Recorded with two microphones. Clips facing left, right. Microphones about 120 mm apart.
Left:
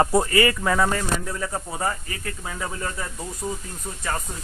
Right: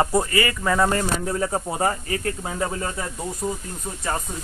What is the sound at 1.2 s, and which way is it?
Speech, 30° right (ahead or behind).